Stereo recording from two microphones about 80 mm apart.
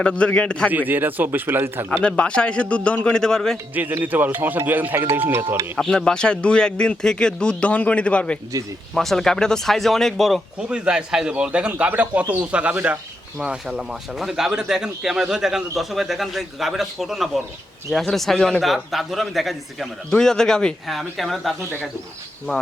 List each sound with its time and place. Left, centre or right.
0.0 s speech: centre
0.7 s speech: right
2.0 s speech: centre
3.8 s speech: right
5.4 s speech: right
5.7 s speech: centre
9.0 s speech: centre
10.6 s a man's voice: centre
13.4 s speech: centre